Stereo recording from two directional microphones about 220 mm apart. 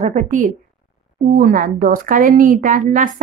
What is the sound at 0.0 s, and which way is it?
A woman's voice, 30° right (ahead or behind).